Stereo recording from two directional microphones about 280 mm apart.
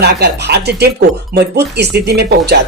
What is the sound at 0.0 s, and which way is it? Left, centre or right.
Speech, right.